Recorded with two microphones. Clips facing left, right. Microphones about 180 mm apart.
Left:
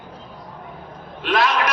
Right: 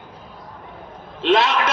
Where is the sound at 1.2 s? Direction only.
25° right (ahead or behind).